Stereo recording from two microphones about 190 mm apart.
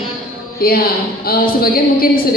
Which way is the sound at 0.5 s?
50° left (ahead or behind).